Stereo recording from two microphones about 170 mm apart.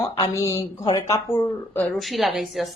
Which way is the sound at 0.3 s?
15° left (ahead or behind).